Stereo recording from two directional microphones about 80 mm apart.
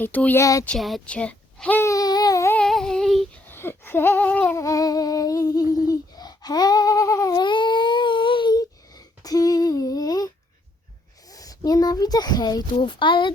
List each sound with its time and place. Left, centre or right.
0.0 s speech: left
0.3 s speech: left
0.8 s speech: centre
1.0 s a child's voice: centre
1.8 s a sound: left
2.6 s humming: centre
3.5 s a sound: left
4.3 s humming: centre
4.5 s humming: left
7.4 s a sound: left
9.2 s a sound: left
11.3 s speech: left
12.7 s speech: left